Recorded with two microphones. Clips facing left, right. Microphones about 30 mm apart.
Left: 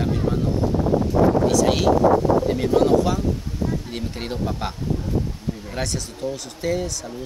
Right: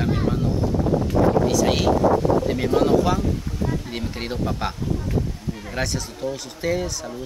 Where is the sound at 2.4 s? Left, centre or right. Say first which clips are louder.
Left 1 dB; centre.